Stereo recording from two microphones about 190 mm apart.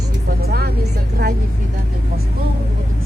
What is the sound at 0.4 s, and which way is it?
Vehicle, 55° right (ahead or behind).